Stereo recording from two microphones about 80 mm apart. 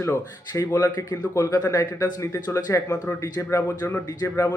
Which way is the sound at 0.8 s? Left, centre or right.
Left.